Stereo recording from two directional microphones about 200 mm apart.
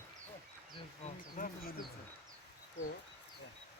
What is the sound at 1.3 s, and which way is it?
Speech, 45° left (ahead or behind).